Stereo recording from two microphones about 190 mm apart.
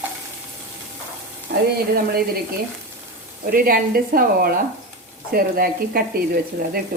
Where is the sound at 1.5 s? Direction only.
65° right (ahead or behind).